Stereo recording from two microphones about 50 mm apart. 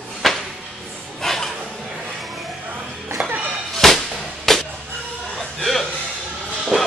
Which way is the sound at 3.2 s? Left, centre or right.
Centre.